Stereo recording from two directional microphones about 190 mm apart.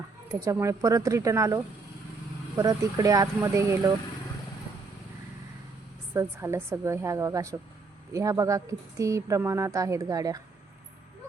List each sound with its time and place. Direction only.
0.3 s speech: 15° right (ahead or behind)
6.1 s speech: 15° right (ahead or behind)